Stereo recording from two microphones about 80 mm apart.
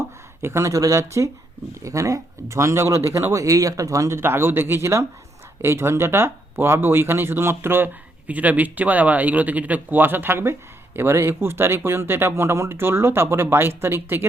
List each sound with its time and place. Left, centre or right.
0.4 s speech: right
8.3 s speech: centre